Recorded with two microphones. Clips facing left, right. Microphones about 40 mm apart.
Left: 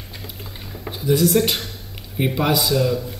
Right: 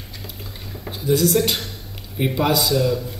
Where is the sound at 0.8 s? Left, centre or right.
Centre.